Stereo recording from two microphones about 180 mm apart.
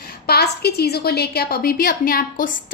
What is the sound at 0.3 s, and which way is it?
A woman's voice, 65° left (ahead or behind).